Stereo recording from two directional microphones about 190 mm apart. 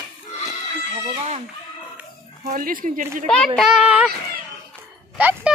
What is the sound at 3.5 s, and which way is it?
Speech, 5° right (ahead or behind).